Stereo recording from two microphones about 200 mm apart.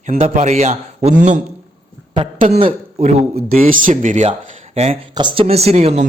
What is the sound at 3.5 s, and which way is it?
A man's voice, 40° right (ahead or behind).